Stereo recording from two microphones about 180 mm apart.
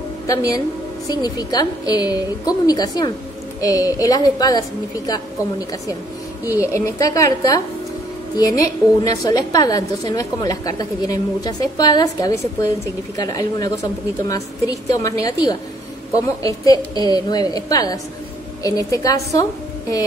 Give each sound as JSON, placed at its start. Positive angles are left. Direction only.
{"t": 0.3, "sound": "a woman's voice", "side_deg": 20}